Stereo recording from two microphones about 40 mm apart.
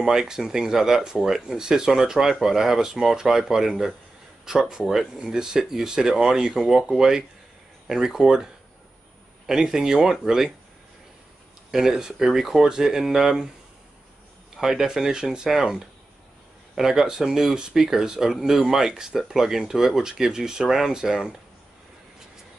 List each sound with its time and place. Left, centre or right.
0.0 s speech: centre
9.5 s speech: centre
11.7 s speech: centre
14.6 s speech: centre